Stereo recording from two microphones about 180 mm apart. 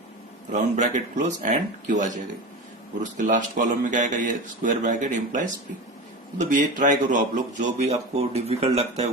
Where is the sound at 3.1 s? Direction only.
45° right (ahead or behind).